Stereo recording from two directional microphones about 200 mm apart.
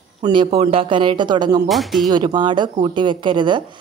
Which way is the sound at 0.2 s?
25° right (ahead or behind).